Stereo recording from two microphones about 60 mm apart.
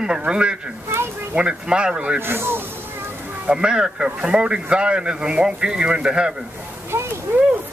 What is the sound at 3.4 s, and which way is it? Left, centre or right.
Speech, centre.